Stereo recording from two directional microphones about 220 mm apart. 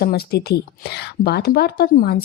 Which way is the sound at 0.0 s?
45° left (ahead or behind).